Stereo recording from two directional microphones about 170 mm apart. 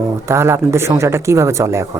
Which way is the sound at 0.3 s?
15° right (ahead or behind).